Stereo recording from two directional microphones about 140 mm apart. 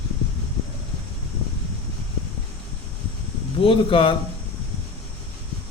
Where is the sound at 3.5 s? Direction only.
40° left (ahead or behind).